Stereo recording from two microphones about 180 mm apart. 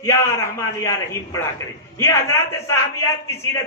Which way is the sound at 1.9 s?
15° left (ahead or behind).